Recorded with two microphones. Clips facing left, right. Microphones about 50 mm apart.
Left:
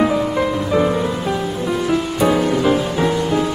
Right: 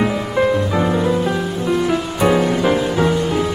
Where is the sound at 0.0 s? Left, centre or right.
Centre.